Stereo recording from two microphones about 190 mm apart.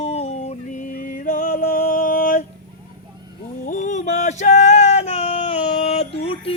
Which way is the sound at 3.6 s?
40° left (ahead or behind).